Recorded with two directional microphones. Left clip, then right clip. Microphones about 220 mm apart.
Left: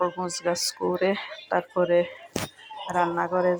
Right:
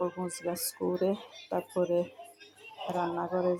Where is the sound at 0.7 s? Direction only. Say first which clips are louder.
Left 6 dB; 20° left (ahead or behind).